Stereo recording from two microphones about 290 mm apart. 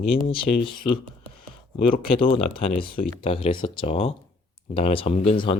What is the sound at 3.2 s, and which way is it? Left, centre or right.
Speech, centre.